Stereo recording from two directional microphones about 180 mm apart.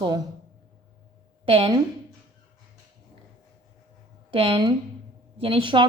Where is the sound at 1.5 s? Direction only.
30° right (ahead or behind).